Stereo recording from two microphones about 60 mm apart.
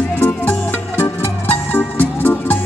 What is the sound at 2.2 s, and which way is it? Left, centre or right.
Music, left.